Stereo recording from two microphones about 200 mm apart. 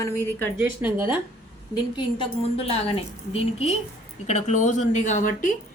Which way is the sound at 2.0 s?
25° left (ahead or behind).